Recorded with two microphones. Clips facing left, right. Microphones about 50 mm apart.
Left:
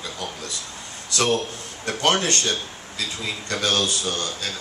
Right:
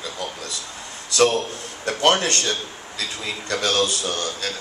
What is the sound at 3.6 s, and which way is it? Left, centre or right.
Speech, right.